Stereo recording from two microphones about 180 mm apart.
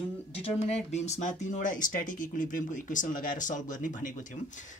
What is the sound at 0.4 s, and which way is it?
Speech, 35° left (ahead or behind).